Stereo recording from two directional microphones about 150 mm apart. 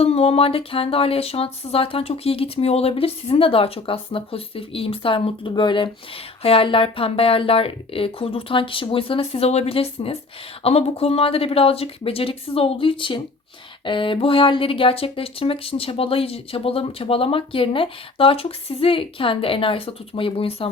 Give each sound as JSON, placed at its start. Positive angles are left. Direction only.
{"t": 0.0, "sound": "speech", "side_deg": 40}